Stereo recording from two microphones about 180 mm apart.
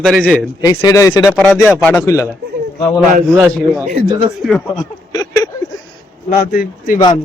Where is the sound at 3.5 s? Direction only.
5° left (ahead or behind).